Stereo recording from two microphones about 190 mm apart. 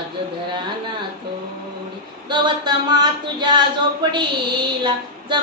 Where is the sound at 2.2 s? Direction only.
25° right (ahead or behind).